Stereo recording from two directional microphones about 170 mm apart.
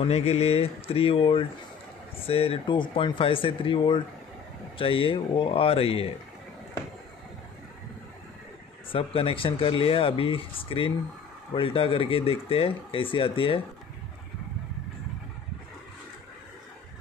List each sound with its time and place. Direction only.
0.0 s speech: 40° left (ahead or behind)
8.9 s speech: 30° left (ahead or behind)